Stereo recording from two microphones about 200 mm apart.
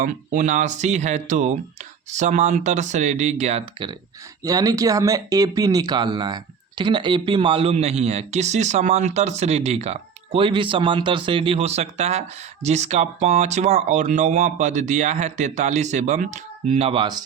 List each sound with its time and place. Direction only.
0.0 s speech: 40° right (ahead or behind)
4.4 s speech: 15° right (ahead or behind)